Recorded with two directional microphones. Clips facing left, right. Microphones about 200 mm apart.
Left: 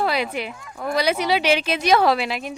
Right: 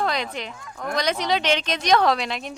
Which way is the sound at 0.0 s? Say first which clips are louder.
Left 3 dB; 5° left (ahead or behind).